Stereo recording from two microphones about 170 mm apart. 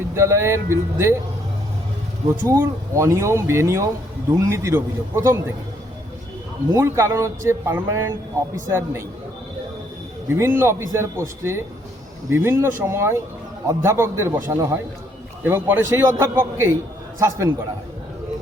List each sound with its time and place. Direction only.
0.1 s speech: 15° right (ahead or behind)
2.5 s speech: 15° right (ahead or behind)
6.7 s speech: 15° right (ahead or behind)
10.2 s speech: 15° right (ahead or behind)